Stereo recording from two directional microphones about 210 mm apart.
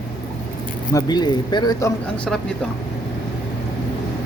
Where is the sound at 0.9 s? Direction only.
20° left (ahead or behind).